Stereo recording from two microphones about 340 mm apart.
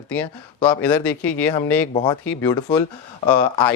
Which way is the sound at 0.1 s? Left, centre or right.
Centre.